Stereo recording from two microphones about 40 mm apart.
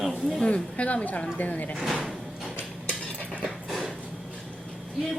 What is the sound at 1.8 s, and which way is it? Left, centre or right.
Door, centre.